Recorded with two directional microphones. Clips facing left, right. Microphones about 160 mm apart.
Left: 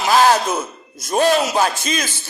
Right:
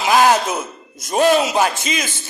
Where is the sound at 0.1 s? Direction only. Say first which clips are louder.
Even; 15° right (ahead or behind).